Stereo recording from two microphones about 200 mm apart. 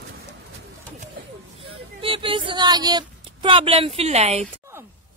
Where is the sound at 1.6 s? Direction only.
25° right (ahead or behind).